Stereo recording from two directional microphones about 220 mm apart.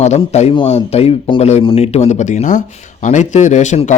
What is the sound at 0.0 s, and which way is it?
A man's voice, 30° left (ahead or behind).